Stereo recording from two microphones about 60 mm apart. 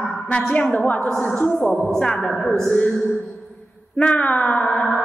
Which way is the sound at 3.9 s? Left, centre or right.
Left.